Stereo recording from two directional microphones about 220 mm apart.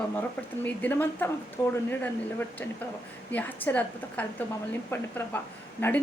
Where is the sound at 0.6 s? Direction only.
10° left (ahead or behind).